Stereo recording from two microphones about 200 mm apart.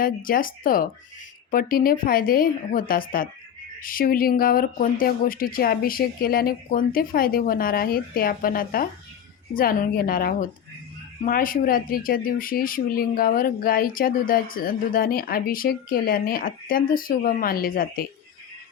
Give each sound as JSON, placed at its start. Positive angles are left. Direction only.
{"t": 0.0, "sound": "speech", "side_deg": 45}